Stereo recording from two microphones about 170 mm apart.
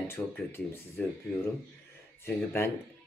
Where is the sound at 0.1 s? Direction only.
15° left (ahead or behind).